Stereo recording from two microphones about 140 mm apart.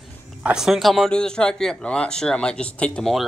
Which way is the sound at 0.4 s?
5° right (ahead or behind).